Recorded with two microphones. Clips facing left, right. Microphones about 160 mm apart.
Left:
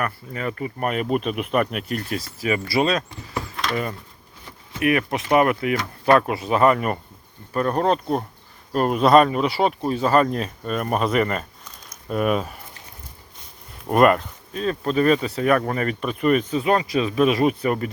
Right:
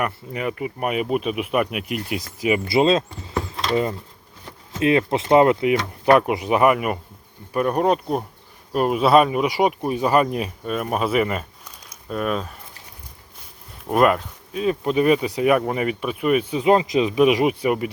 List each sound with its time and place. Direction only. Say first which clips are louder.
0.0 s speech: right 2 dB; 15° right (ahead or behind)
3.5 s a sound: right 4 dB; 30° right (ahead or behind)
4.8 s speech: right 3 dB; 25° right (ahead or behind); by 11.4 s 5° right (ahead or behind)
12.0 s speech: left 3 dB; 5° left (ahead or behind)
13.8 s speech: left 1 dB; centre (ahead or behind)